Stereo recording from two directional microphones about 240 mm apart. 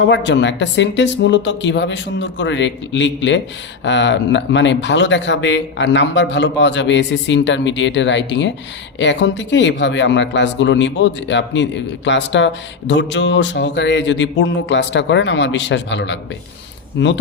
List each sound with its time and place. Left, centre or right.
0.1 s speech: left